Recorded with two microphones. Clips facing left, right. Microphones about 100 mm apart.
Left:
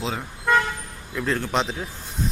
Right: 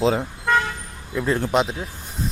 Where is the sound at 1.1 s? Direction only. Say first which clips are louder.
Right 4 dB; 15° right (ahead or behind).